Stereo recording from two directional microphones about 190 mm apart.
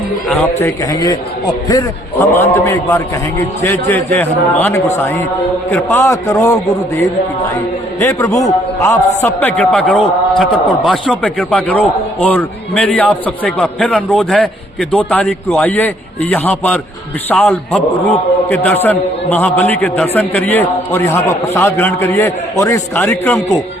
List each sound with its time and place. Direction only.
0.3 s a man's voice: 10° left (ahead or behind)
8.0 s a man's voice: 15° left (ahead or behind)